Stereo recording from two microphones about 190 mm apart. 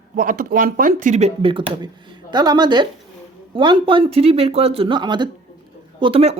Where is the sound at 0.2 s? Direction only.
45° right (ahead or behind).